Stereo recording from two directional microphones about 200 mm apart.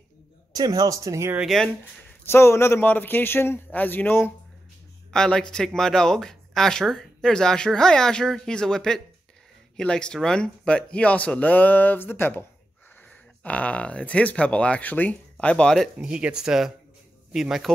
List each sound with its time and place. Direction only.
0.5 s speech: 20° right (ahead or behind)
1.4 s a man's voice: centre (ahead or behind)